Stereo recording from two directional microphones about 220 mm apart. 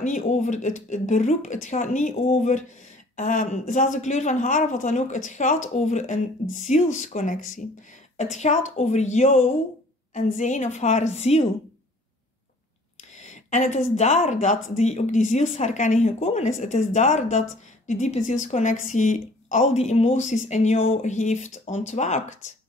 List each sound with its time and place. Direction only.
0.0 s speech: 35° left (ahead or behind)
13.1 s speech: 30° left (ahead or behind)